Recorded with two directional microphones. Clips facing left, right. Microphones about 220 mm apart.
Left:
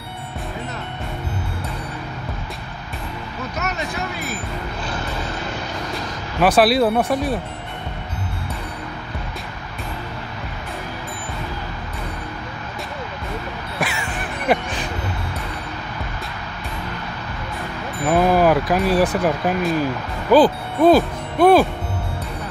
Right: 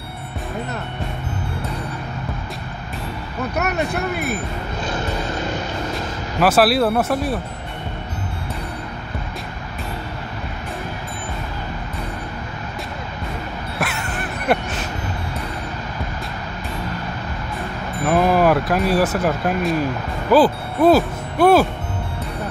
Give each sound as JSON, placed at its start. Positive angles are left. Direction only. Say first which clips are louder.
{"t": 3.5, "sound": "speech", "louder": "right 5 dB", "side_deg": -60}
{"t": 6.4, "sound": "speech", "louder": "left 1 dB", "side_deg": 0}
{"t": 13.7, "sound": "honk", "louder": "even", "side_deg": 0}
{"t": 18.0, "sound": "speech", "louder": "even", "side_deg": 0}